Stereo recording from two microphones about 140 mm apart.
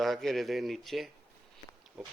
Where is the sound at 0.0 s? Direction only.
Centre (ahead or behind).